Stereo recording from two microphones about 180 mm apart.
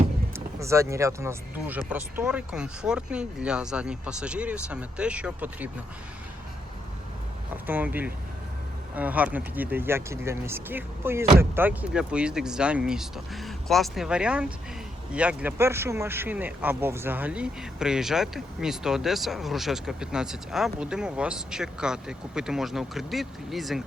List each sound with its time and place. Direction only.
0.3 s speech: 15° right (ahead or behind)
7.5 s speech: 10° right (ahead or behind)